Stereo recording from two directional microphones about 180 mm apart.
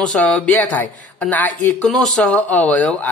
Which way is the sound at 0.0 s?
5° left (ahead or behind).